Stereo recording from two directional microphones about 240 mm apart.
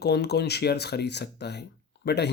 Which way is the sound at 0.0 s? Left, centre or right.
Left.